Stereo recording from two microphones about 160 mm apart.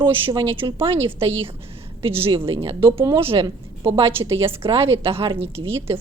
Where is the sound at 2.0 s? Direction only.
35° right (ahead or behind).